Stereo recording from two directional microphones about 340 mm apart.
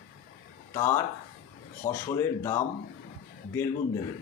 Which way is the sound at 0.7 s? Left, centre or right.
Centre.